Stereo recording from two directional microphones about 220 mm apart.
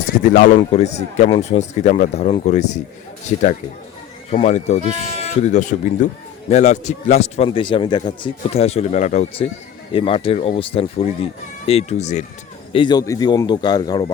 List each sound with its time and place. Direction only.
0.3 s speech: 35° left (ahead or behind)
4.3 s a man's voice: 30° left (ahead or behind)
12.7 s a man's voice: 20° left (ahead or behind)